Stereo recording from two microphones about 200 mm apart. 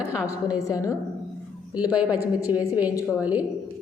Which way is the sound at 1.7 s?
5° right (ahead or behind).